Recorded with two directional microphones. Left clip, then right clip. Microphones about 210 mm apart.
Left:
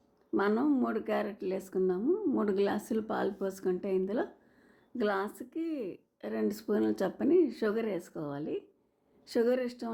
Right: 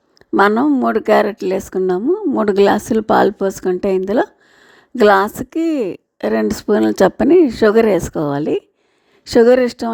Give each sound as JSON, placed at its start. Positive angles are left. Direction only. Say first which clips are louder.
{"t": 0.3, "sound": "a woman's voice", "louder": "right 16 dB", "side_deg": -45}